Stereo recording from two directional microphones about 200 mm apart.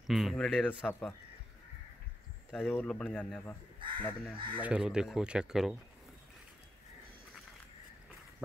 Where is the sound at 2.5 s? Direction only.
10° left (ahead or behind).